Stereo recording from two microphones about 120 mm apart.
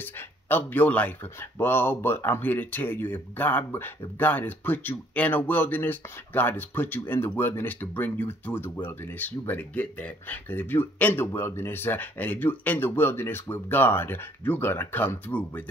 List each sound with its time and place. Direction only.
0.0 s speech: 15° left (ahead or behind)